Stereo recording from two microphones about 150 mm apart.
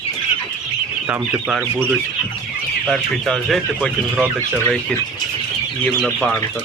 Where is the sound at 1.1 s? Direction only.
10° right (ahead or behind).